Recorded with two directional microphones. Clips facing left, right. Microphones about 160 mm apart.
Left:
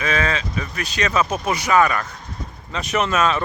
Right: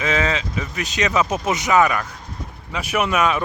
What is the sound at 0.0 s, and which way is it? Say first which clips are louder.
Speech: right 1 dB; 20° right (ahead or behind).